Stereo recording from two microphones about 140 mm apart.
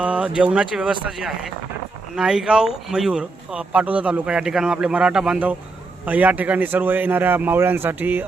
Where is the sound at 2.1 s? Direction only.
5° right (ahead or behind).